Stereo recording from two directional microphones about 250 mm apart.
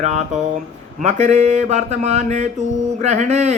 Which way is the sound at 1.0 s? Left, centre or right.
Right.